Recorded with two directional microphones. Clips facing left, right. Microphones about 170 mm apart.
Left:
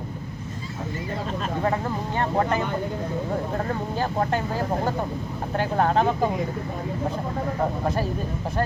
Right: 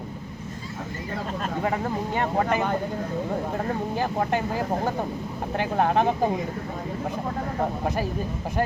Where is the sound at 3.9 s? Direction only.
15° right (ahead or behind).